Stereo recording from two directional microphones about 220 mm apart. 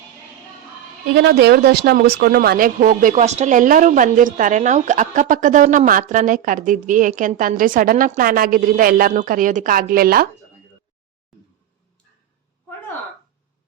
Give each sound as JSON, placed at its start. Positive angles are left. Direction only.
{"t": 1.1, "sound": "speech", "side_deg": -50}